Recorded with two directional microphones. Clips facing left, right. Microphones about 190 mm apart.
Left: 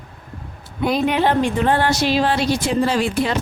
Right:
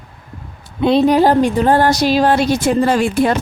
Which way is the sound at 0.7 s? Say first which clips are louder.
Right 7 dB; 30° right (ahead or behind).